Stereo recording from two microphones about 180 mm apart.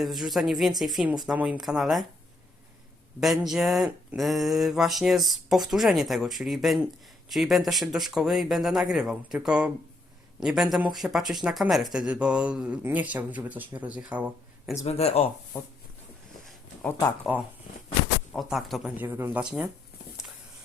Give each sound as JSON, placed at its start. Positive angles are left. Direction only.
{"t": 0.0, "sound": "speech", "side_deg": 0}
{"t": 3.2, "sound": "speech", "side_deg": 0}
{"t": 14.8, "sound": "speech", "side_deg": 35}
{"t": 17.3, "sound": "speech", "side_deg": -5}